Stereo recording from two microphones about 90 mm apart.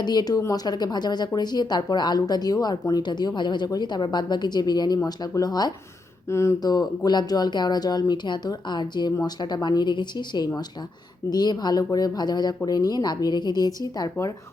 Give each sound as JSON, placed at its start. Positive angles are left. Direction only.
{"t": 0.0, "sound": "speech", "side_deg": 50}
{"t": 6.2, "sound": "speech", "side_deg": 30}
{"t": 6.6, "sound": "speech", "side_deg": 45}